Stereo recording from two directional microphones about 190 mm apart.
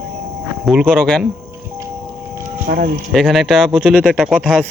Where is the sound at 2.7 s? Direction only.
45° right (ahead or behind).